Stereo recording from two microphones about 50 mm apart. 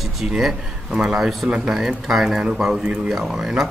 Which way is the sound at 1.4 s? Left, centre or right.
Right.